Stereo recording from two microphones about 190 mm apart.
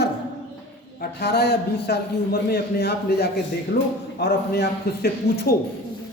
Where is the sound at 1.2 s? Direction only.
60° left (ahead or behind).